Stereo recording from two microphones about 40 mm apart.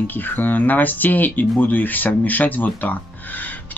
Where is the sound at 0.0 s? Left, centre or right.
Left.